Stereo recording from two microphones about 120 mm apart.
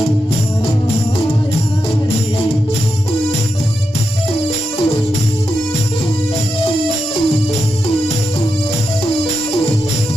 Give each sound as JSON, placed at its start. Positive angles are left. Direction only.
{"t": 4.4, "sound": "music", "side_deg": 55}